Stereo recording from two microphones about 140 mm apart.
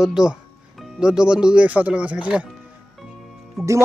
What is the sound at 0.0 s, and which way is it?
Speech, 5° right (ahead or behind).